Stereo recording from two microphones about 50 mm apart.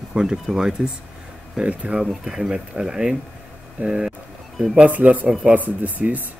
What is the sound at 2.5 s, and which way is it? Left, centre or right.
Speech, centre.